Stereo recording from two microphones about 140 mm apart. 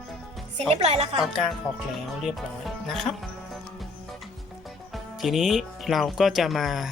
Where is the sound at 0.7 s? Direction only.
50° right (ahead or behind).